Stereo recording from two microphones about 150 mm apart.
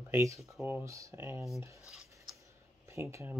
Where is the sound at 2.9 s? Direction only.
20° right (ahead or behind).